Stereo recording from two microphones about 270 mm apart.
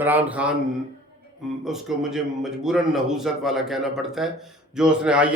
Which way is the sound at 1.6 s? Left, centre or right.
Centre.